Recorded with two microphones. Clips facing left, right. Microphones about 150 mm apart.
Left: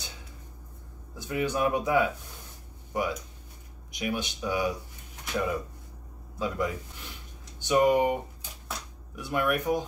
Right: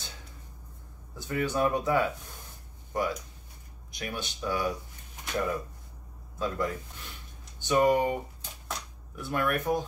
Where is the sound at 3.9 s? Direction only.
15° left (ahead or behind).